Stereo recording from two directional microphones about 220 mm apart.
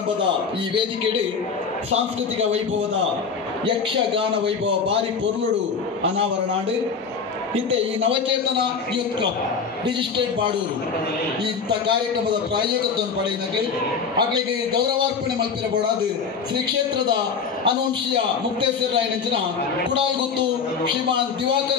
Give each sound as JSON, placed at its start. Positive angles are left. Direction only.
{"t": 3.6, "sound": "a man's voice", "side_deg": -25}
{"t": 17.6, "sound": "a man's voice", "side_deg": -20}